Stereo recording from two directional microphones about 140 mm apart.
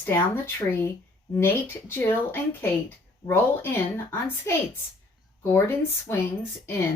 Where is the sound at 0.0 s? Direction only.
15° left (ahead or behind).